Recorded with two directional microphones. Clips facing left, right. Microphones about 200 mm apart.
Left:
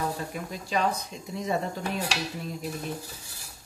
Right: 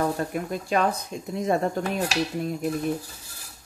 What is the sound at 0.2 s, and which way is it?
Speech, 55° right (ahead or behind).